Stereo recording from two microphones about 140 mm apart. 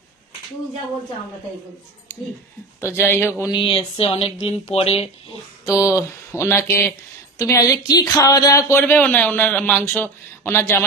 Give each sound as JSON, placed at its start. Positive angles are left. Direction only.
{"t": 2.8, "sound": "speech", "side_deg": 15}
{"t": 3.5, "sound": "speech", "side_deg": 40}
{"t": 5.7, "sound": "speech", "side_deg": 20}